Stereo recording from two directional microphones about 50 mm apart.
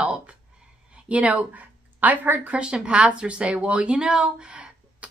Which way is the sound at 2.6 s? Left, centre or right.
Right.